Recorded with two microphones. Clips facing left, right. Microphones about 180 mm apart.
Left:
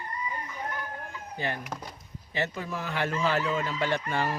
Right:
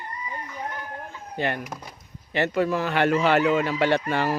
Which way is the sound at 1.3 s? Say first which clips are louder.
Right 6 dB; 65° right (ahead or behind).